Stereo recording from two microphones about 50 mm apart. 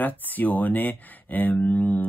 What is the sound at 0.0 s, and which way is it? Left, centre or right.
Speech, left.